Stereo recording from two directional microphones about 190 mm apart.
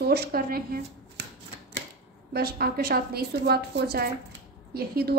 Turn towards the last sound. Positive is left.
turn(degrees=-55)  # may be behind; listen again after turning